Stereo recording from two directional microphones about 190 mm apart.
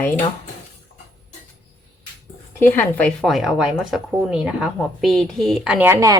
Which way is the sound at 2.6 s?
10° left (ahead or behind).